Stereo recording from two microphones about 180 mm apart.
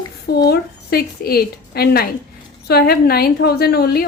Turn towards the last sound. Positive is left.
turn(degrees=60)  # may be behind; listen again after turning